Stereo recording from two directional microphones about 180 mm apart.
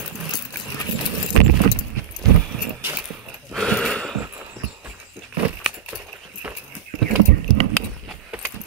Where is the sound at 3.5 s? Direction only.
5° left (ahead or behind).